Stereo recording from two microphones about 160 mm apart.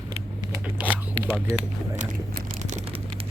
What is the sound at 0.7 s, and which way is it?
Zipper, 10° right (ahead or behind).